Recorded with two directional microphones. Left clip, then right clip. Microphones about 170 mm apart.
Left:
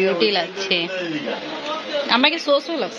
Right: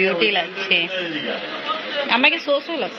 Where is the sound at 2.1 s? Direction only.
30° left (ahead or behind).